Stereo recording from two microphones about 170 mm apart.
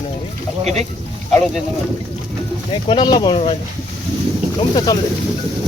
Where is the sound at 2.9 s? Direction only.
25° left (ahead or behind).